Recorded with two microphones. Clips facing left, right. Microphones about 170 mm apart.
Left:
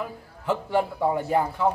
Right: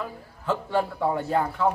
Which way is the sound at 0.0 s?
15° left (ahead or behind).